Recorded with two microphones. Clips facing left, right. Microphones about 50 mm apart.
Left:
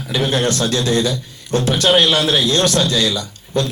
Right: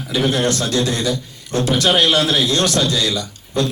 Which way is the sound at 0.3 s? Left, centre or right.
Left.